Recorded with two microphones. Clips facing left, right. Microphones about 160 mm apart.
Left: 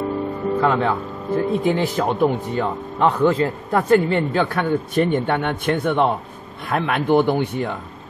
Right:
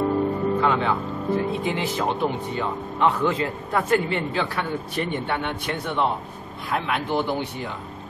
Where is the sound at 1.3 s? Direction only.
45° left (ahead or behind).